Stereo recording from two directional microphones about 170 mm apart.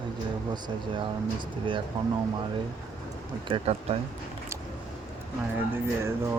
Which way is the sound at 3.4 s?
30° right (ahead or behind).